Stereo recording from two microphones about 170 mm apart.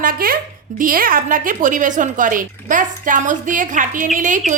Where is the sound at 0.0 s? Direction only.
60° right (ahead or behind).